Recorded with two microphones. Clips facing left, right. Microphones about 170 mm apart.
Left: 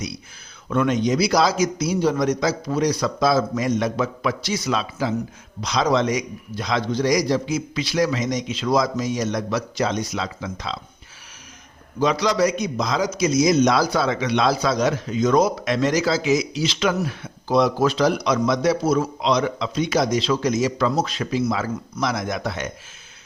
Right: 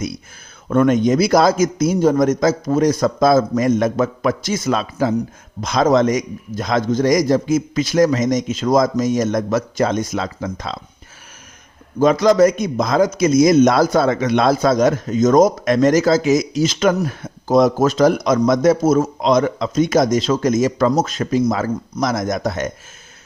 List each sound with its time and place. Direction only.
0.7 s a man's voice: 50° right (ahead or behind)
11.9 s a man's voice: 50° right (ahead or behind)